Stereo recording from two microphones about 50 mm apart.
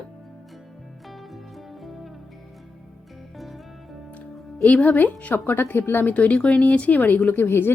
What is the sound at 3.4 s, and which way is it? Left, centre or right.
Music, centre.